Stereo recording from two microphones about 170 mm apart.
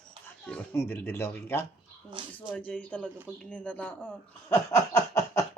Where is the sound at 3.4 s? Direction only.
10° left (ahead or behind).